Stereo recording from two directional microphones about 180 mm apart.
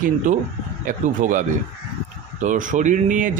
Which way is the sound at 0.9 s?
45° right (ahead or behind).